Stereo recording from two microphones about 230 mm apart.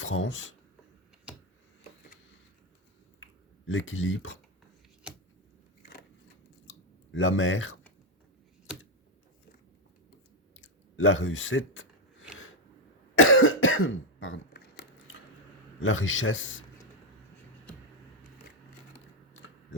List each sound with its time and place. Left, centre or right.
0.0 s a man's voice: left
1.3 s a sound: centre
3.7 s a man's voice: left
5.8 s a sound: left
6.7 s chewing: left
10.6 s speech: left
13.1 s cough: left
15.8 s a man's voice: left